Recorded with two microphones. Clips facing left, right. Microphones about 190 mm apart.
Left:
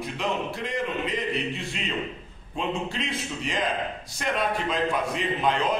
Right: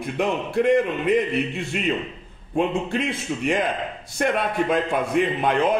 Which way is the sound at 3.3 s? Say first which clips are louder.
Right 7 dB; 50° right (ahead or behind).